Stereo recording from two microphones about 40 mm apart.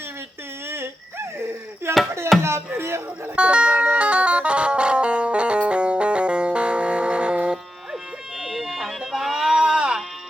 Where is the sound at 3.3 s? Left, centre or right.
Right.